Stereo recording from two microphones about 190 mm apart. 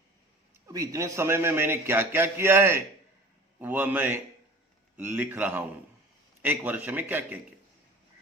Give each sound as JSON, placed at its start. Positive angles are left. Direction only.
{"t": 0.7, "sound": "a man's voice", "side_deg": -15}